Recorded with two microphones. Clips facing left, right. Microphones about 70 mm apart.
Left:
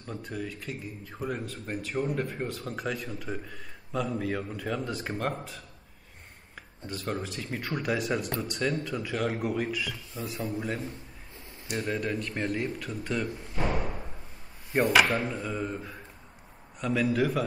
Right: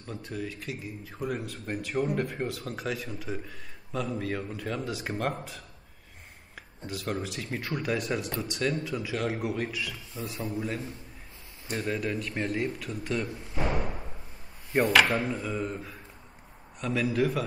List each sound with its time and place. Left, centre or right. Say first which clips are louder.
0.0 s speech: even; centre
6.9 s speech: even; centre
10.1 s a man's voice: even; centre
10.5 s speech: even; centre
15.0 s speech: right 1 dB; centre